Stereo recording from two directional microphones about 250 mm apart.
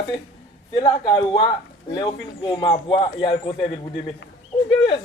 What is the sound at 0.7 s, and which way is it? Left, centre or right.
Speech, centre.